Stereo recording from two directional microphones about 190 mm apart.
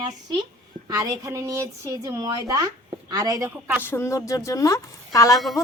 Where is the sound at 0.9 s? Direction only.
20° right (ahead or behind).